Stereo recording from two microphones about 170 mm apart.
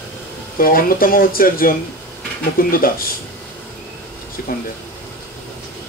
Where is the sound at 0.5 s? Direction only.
55° left (ahead or behind).